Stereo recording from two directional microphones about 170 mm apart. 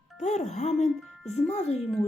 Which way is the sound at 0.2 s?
45° left (ahead or behind).